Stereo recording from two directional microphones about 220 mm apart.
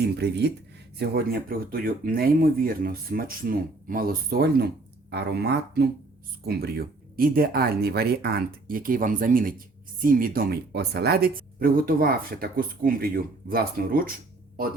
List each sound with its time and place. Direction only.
0.0 s speech: 50° right (ahead or behind)